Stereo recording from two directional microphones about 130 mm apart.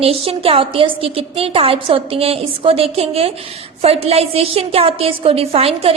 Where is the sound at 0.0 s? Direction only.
45° right (ahead or behind).